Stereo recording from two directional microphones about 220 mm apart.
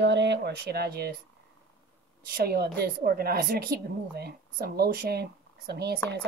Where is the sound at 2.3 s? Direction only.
45° right (ahead or behind).